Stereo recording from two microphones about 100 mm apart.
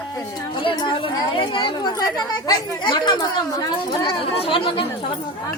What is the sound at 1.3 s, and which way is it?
A woman's voice, 55° left (ahead or behind).